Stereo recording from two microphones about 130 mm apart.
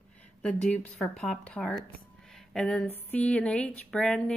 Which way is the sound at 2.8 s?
15° left (ahead or behind).